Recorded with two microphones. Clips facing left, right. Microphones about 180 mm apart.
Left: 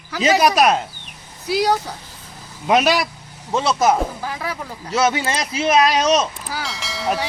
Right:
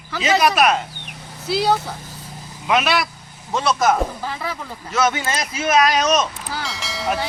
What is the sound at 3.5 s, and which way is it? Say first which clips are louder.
A woman's voice: left 1 dB; 20° left (ahead or behind).